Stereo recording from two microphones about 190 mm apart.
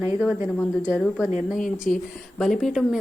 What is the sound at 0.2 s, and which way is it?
Speech, centre (ahead or behind).